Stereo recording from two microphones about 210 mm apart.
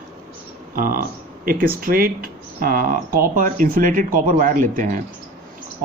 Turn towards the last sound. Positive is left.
turn(degrees=-40)  # may be behind; listen again after turning